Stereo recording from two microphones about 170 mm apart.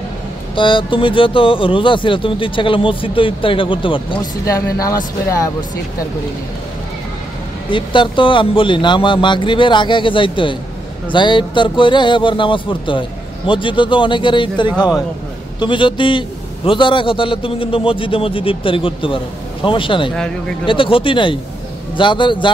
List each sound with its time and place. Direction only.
0.6 s a man's voice: 30° left (ahead or behind)
4.5 s speech: 20° left (ahead or behind)
7.7 s a man's voice: 30° left (ahead or behind)